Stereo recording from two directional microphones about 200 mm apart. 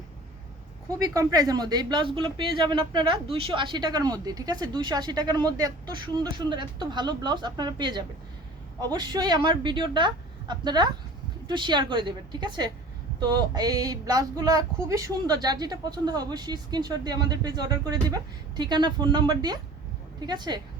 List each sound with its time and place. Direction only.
0.9 s a woman's voice: 15° right (ahead or behind)